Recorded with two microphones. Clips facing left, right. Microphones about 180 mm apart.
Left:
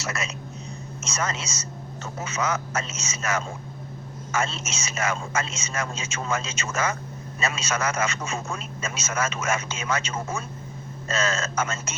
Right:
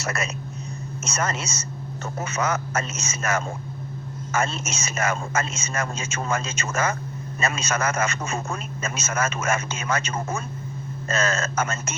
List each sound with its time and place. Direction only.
0.0 s a man's voice: 55° right (ahead or behind)